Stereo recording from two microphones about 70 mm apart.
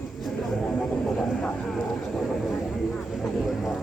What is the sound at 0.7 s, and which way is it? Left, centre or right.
Vehicle, centre.